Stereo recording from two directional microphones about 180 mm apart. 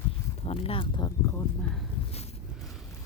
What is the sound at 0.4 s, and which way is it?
Speech, 30° left (ahead or behind).